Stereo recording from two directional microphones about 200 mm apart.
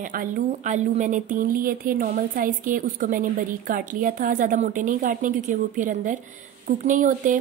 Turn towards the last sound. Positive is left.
turn(degrees=-40)  # may be behind; listen again after turning